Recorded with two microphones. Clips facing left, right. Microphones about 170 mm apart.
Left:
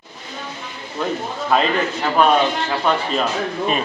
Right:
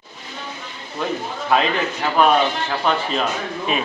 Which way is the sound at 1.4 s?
Centre (ahead or behind).